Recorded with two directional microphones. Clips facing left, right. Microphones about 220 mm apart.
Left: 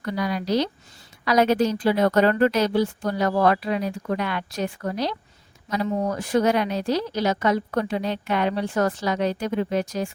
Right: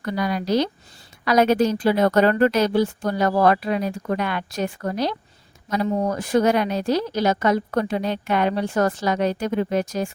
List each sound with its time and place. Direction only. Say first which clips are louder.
0.0 s a woman's voice: right 2 dB; 50° right (ahead or behind)